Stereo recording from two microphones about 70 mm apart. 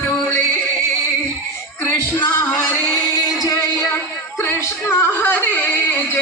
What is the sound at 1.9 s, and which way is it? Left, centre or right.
Music, left.